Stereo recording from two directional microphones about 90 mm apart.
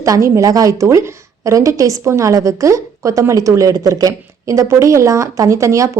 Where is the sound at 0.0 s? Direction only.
35° right (ahead or behind).